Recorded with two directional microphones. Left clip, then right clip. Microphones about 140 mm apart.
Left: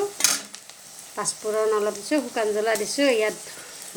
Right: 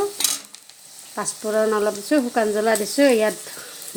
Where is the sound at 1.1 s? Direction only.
85° right.